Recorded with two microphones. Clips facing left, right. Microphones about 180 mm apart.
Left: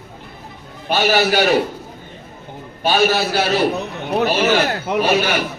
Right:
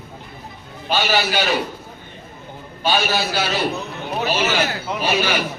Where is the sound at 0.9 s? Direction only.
45° left (ahead or behind).